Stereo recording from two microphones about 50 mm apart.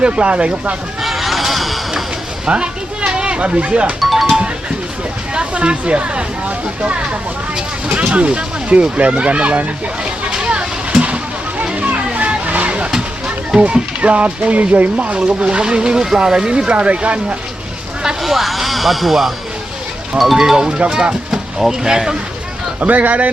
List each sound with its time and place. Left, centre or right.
0.0 s speech: right
1.0 s a sound: centre
2.5 s a sound: centre
4.0 s music: centre
5.3 s speech: right
7.9 s a sound: right
13.6 s speech: right
18.2 s speech: centre
20.4 s speech: centre
22.8 s speech: right